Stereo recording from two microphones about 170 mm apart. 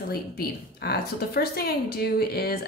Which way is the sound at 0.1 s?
65° left (ahead or behind).